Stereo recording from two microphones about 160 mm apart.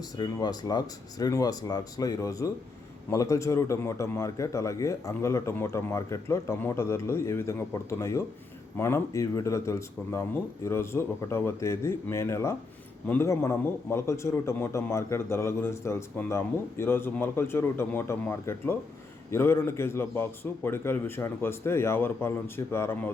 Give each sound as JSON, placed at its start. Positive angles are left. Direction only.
{"t": 0.2, "sound": "a man's voice", "side_deg": 25}